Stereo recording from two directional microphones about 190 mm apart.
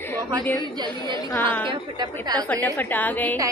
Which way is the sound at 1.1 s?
20° left (ahead or behind).